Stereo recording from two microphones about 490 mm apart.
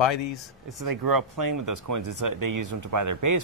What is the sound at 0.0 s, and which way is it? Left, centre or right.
Speech, left.